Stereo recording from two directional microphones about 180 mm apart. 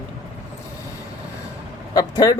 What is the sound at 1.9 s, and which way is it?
Speech, 20° left (ahead or behind).